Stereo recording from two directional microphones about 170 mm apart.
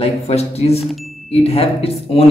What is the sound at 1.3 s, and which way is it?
Speech, 35° left (ahead or behind).